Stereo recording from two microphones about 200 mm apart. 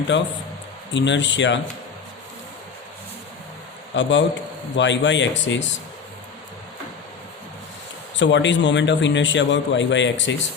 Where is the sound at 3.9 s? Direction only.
65° left (ahead or behind).